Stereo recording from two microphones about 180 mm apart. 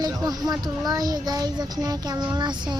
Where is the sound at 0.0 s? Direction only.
20° right (ahead or behind).